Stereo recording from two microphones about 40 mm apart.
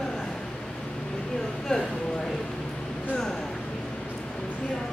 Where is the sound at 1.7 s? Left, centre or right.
Left.